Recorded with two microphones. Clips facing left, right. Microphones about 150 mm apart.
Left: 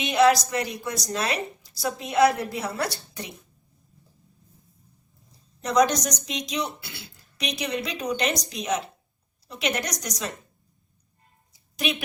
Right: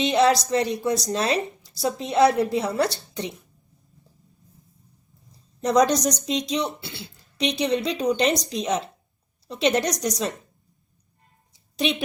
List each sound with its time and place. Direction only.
0.0 s speech: 30° right (ahead or behind)
5.6 s a woman's voice: 30° right (ahead or behind)
11.8 s speech: 30° right (ahead or behind)